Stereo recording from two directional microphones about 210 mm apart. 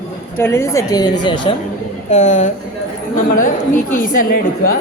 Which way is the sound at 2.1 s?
30° left (ahead or behind).